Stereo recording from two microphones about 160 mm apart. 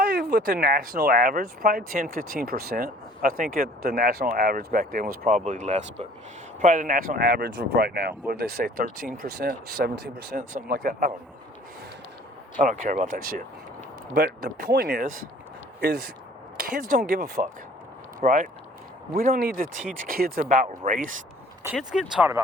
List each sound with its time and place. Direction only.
0.0 s speech: 80° right; by 5.4 s 65° right (ahead or behind)
5.4 s speech: 50° right (ahead or behind)
12.5 s speech: 55° right (ahead or behind)
15.8 s speech: 80° right
16.6 s speech: 65° right (ahead or behind)
21.9 s speech: centre (ahead or behind)